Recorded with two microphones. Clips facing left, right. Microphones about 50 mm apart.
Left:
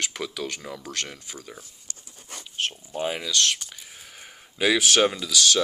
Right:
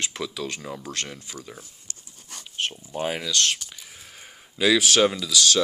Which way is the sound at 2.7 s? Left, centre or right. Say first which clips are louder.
Right 1 dB; centre.